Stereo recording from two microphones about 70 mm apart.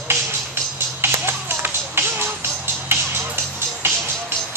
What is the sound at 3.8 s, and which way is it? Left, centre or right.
Music, right.